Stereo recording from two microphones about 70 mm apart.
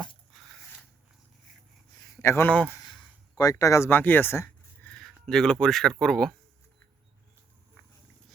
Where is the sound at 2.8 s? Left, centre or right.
Left.